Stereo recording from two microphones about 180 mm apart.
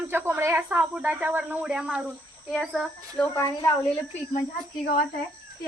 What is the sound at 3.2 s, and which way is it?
Speech, 15° left (ahead or behind).